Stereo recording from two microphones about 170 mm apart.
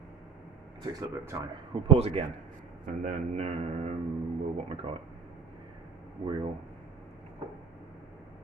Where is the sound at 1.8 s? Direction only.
40° right (ahead or behind).